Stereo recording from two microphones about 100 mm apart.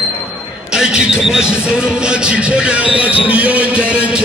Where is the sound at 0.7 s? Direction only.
5° right (ahead or behind).